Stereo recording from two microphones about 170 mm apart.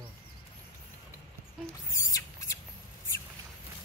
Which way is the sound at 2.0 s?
20° left (ahead or behind).